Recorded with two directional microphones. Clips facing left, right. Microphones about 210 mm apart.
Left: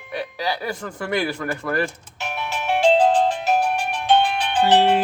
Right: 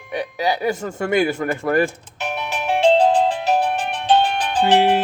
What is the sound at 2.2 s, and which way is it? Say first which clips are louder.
Music: right 2 dB; 15° right (ahead or behind).